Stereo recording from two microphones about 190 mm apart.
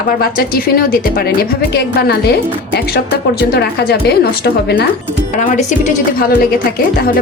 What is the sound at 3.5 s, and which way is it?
A woman's voice, 60° left (ahead or behind).